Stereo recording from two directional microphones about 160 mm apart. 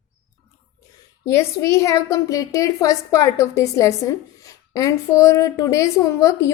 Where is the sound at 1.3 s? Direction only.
15° left (ahead or behind).